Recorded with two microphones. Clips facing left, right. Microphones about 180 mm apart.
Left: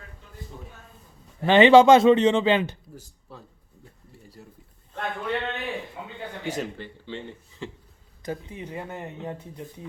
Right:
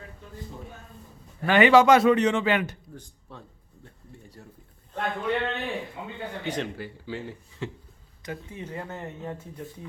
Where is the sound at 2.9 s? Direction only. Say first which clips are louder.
Even; 5° left (ahead or behind).